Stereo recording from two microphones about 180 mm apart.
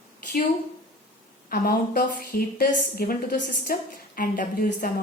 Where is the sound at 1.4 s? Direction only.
55° left (ahead or behind).